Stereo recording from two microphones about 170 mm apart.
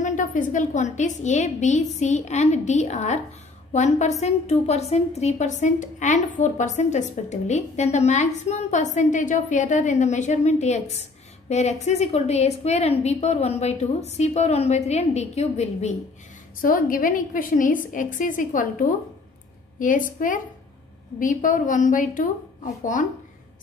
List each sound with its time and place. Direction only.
0.0 s a woman's voice: 50° left (ahead or behind)
16.6 s a woman's voice: 55° left (ahead or behind)